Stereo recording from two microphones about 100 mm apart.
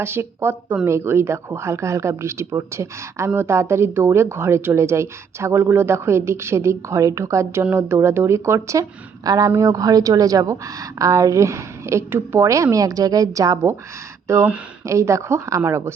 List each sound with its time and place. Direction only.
0.0 s a woman's voice: 25° right (ahead or behind)